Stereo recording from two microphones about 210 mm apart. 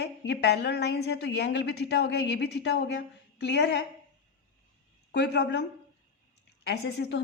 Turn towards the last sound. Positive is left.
turn(degrees=55)  # may be behind; listen again after turning